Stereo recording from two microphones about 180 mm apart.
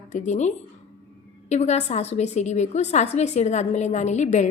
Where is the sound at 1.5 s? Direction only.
40° left (ahead or behind).